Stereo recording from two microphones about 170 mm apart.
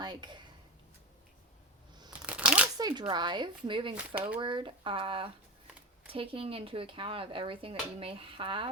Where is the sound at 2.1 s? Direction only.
5° right (ahead or behind).